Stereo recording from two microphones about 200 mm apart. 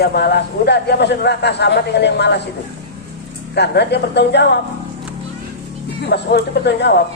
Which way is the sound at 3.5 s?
60° left (ahead or behind).